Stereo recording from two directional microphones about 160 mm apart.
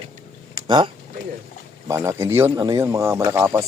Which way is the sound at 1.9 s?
15° right (ahead or behind).